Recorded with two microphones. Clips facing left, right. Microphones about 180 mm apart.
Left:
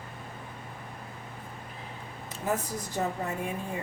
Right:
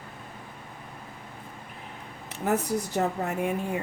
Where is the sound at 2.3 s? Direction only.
70° right (ahead or behind).